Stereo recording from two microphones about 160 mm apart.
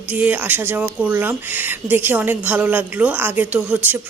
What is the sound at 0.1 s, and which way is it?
Speech, 10° right (ahead or behind).